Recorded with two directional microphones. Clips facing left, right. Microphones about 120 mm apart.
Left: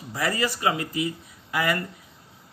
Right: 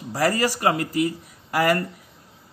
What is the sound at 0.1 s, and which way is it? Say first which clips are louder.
Speech: right 5 dB; 45° right (ahead or behind).